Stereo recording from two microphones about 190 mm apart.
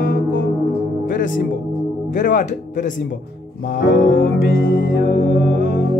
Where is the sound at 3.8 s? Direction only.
45° left (ahead or behind).